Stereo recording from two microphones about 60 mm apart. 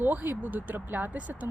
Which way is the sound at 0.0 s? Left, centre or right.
Right.